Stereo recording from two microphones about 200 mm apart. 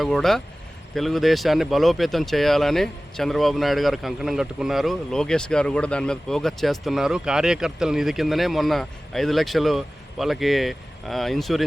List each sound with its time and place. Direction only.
0.0 s speech: centre (ahead or behind)